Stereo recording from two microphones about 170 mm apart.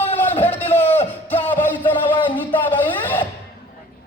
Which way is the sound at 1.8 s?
30° left (ahead or behind).